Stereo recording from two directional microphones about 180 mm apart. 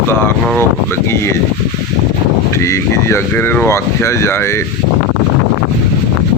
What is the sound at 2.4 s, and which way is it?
Speech, 15° left (ahead or behind).